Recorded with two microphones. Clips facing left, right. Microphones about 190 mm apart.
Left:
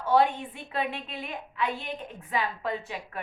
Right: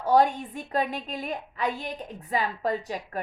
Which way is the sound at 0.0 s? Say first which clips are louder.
Right 2 dB; 40° right (ahead or behind).